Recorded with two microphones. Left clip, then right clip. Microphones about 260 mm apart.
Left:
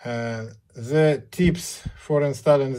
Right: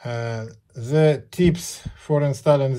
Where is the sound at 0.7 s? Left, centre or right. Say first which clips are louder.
Right 1 dB; right.